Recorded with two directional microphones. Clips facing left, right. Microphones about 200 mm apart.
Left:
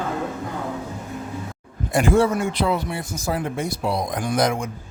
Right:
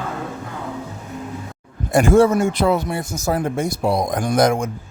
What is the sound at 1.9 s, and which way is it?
Speech, 45° right (ahead or behind).